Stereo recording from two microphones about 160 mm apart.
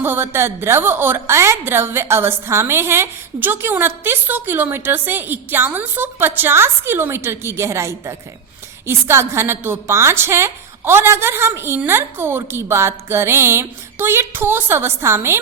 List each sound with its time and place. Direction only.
0.0 s a woman's voice: 15° right (ahead or behind)